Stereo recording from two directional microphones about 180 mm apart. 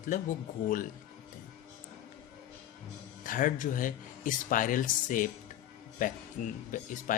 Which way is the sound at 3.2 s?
50° left (ahead or behind).